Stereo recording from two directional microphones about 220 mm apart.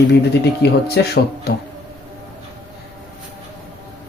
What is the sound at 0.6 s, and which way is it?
Speech, 50° left (ahead or behind).